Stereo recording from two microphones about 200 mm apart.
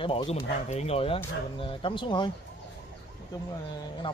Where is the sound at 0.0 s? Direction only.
25° left (ahead or behind).